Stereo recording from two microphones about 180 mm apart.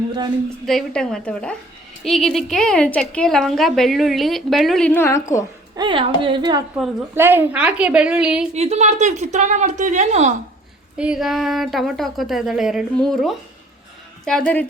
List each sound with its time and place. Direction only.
0.6 s a woman's voice: centre (ahead or behind)
5.7 s a woman's voice: 25° right (ahead or behind)
7.1 s a woman's voice: 10° right (ahead or behind)
8.5 s speech: 35° right (ahead or behind)
10.9 s a woman's voice: 5° right (ahead or behind)